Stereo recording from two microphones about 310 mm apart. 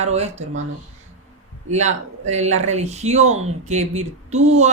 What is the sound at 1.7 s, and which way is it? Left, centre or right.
Speech, right.